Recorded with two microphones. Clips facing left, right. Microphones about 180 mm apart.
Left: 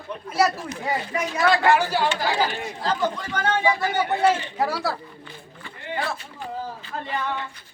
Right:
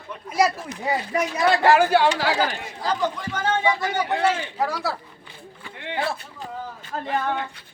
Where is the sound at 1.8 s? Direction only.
60° right (ahead or behind).